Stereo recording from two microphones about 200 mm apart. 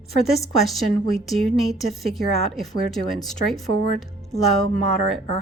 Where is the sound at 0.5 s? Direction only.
Centre (ahead or behind).